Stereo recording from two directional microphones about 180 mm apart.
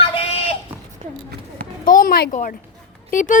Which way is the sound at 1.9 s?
50° left (ahead or behind).